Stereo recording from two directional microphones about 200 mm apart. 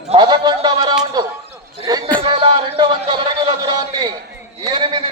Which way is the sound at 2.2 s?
25° right (ahead or behind).